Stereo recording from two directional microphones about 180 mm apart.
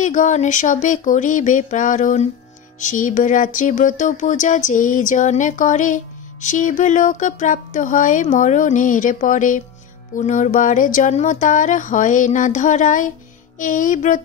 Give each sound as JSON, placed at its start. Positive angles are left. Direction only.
{"t": 0.0, "sound": "music", "side_deg": 45}